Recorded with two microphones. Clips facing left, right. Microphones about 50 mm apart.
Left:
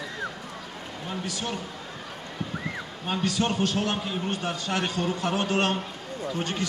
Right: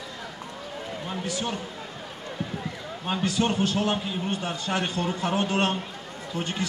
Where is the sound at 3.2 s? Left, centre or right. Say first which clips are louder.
Right 1 dB; right.